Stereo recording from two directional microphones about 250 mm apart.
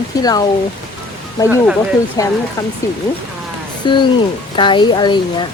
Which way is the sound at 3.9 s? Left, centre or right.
Centre.